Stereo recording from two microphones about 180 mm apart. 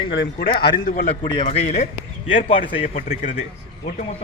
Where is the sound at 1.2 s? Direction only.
25° left (ahead or behind).